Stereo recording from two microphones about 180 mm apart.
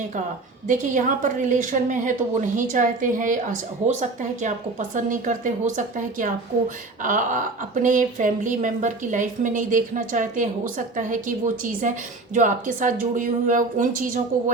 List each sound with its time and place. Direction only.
0.7 s speech: 45° right (ahead or behind)